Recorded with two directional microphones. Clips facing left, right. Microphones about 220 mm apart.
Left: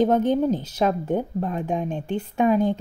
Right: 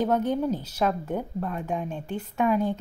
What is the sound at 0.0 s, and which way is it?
Speech, 30° left (ahead or behind).